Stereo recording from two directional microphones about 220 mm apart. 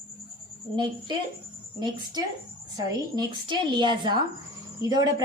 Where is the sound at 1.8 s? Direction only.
20° right (ahead or behind).